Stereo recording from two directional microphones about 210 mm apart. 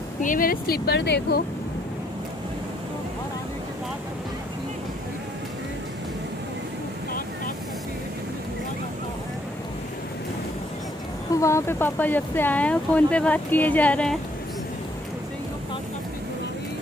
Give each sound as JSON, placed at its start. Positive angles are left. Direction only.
{"t": 0.2, "sound": "speech", "side_deg": 40}
{"t": 11.3, "sound": "speech", "side_deg": 15}